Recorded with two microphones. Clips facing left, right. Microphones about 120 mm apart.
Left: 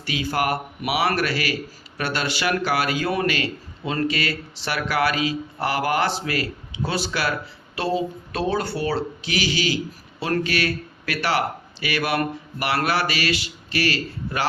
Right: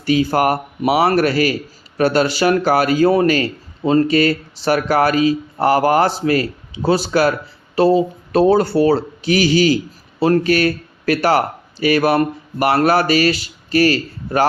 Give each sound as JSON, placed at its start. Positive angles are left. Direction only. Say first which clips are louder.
{"t": 0.0, "sound": "speech", "louder": "right 9 dB", "side_deg": -40}